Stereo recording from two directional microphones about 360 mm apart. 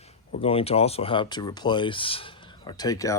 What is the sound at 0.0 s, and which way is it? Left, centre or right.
Speech, centre.